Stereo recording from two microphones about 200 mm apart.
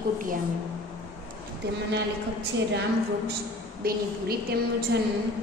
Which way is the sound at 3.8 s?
50° right (ahead or behind).